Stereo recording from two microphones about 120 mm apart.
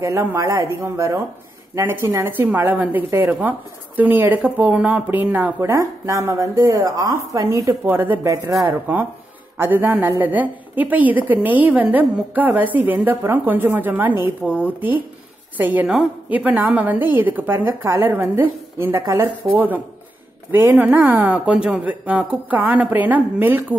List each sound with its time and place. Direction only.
0.0 s a woman's voice: 25° right (ahead or behind)
19.5 s a woman's voice: 15° right (ahead or behind)